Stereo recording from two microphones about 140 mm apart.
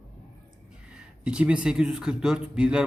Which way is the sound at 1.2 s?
5° right (ahead or behind).